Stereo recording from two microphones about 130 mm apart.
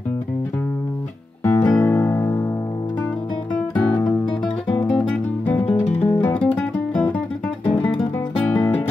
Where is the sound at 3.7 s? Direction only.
10° left (ahead or behind).